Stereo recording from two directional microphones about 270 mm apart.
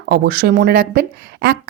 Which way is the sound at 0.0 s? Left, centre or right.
Right.